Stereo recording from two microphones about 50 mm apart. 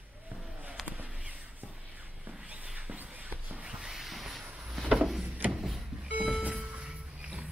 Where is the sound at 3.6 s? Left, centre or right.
Centre.